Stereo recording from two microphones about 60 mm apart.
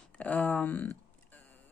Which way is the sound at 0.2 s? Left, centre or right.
Left.